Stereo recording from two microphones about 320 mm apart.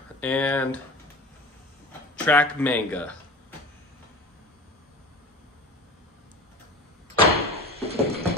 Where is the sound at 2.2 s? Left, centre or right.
Centre.